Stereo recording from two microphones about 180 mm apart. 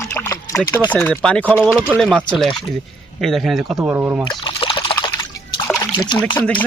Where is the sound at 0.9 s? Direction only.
5° left (ahead or behind).